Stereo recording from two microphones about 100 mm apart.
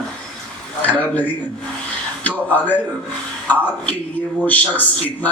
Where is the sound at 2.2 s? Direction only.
15° left (ahead or behind).